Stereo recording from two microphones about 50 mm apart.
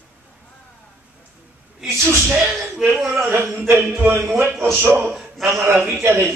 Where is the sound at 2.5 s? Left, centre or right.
Centre.